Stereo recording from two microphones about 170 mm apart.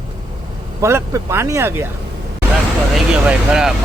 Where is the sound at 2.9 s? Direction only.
5° right (ahead or behind).